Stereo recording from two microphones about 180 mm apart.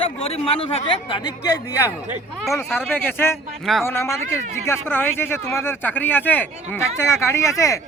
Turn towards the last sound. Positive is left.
turn(degrees=15)  # may be behind; listen again after turning